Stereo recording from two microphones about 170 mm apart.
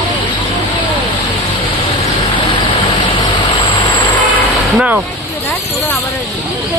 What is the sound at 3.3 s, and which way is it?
Vehicle, 30° left (ahead or behind).